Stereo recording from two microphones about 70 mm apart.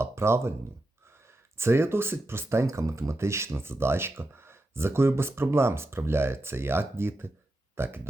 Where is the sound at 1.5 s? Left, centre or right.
Right.